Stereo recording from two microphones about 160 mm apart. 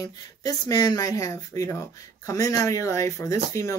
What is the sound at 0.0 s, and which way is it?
Speech, 25° left (ahead or behind).